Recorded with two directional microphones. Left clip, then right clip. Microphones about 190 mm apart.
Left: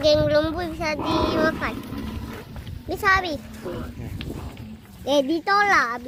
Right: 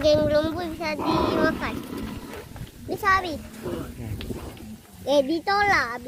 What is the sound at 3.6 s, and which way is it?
Speech, 15° right (ahead or behind).